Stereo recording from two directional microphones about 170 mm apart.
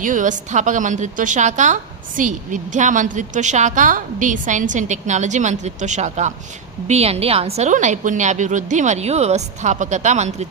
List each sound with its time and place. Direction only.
0.0 s a woman's voice: 50° right (ahead or behind)